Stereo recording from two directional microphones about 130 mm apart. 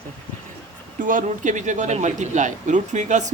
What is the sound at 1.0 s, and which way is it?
Speech, 85° right.